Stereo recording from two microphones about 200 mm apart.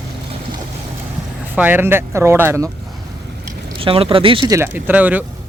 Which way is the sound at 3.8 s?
25° right (ahead or behind).